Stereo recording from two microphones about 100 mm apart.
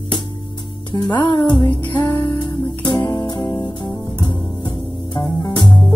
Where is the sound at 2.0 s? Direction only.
50° left (ahead or behind).